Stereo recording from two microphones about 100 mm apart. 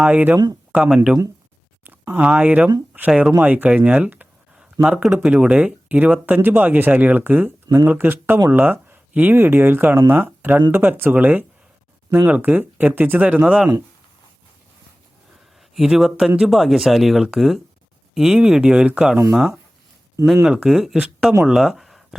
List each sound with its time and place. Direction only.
0.0 s speech: 15° right (ahead or behind)
1.8 s speech: 20° right (ahead or behind)
3.3 s speech: 15° right (ahead or behind)
15.7 s speech: 5° right (ahead or behind)